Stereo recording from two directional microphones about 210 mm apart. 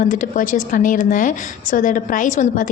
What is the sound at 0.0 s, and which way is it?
A woman's voice, 40° left (ahead or behind).